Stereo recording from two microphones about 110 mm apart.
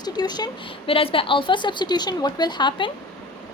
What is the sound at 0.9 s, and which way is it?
A woman's voice, 55° left (ahead or behind).